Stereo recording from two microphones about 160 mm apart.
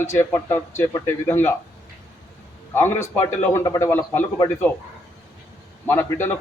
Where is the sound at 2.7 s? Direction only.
15° left (ahead or behind).